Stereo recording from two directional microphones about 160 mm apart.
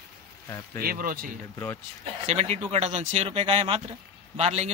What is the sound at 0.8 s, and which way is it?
Speech, 65° right (ahead or behind).